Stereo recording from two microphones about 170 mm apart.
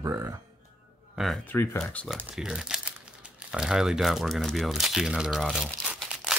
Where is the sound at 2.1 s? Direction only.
5° right (ahead or behind).